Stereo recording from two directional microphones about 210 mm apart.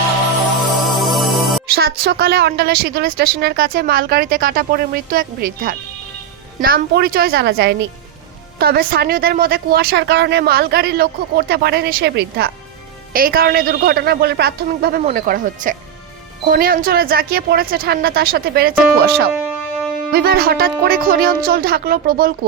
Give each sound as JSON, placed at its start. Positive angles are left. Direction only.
{"t": 0.9, "sound": "music", "side_deg": 0}
{"t": 1.7, "sound": "a woman's voice", "side_deg": -50}
{"t": 19.3, "sound": "music", "side_deg": -5}
{"t": 20.1, "sound": "a woman's voice", "side_deg": -45}